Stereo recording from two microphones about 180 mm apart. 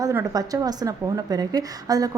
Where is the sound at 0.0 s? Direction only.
15° right (ahead or behind).